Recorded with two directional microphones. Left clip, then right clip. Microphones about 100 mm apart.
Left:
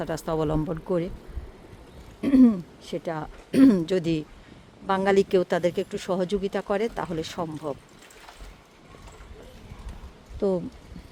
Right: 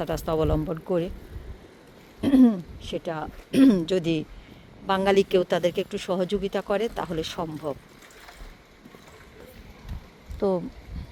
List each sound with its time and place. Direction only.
0.0 s speech: 20° left (ahead or behind)
2.2 s speech: 40° left (ahead or behind); by 7.8 s 20° left (ahead or behind)
10.4 s speech: 30° left (ahead or behind)